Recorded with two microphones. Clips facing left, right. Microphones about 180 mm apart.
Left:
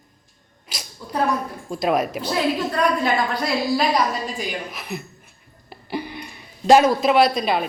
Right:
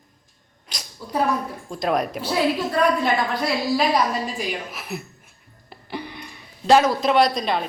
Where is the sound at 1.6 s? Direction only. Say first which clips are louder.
Left 2 dB; 5° left (ahead or behind).